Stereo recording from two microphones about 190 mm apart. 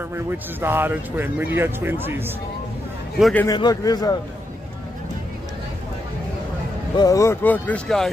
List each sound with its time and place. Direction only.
0.1 s speech: 10° right (ahead or behind)
3.2 s speech: centre (ahead or behind)
3.4 s a man's voice: 20° left (ahead or behind)
7.0 s speech: 15° left (ahead or behind)